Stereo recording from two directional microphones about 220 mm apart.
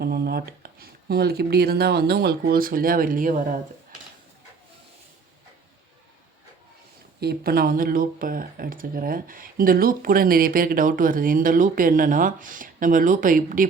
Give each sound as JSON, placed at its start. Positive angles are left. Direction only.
{"t": 0.0, "sound": "speech", "side_deg": -45}
{"t": 7.2, "sound": "speech", "side_deg": -45}